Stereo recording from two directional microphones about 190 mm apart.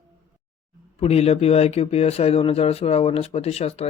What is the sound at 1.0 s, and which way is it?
Speech, 30° left (ahead or behind).